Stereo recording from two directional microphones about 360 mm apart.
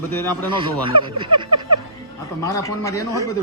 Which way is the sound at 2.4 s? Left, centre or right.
Centre.